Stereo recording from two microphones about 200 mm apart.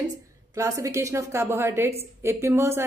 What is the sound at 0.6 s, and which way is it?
A woman's voice, 15° right (ahead or behind).